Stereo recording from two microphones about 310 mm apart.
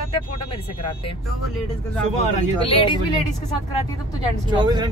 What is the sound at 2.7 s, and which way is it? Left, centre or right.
Speech, centre.